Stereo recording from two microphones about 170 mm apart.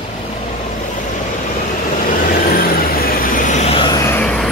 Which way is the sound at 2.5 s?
60° left (ahead or behind).